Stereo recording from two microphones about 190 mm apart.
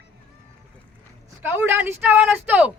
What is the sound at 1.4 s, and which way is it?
Speech, 10° right (ahead or behind).